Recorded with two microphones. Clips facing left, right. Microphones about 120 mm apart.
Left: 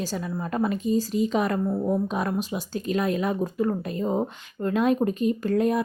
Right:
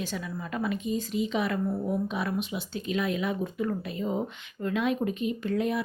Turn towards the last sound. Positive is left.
turn(degrees=45)  # may be behind; listen again after turning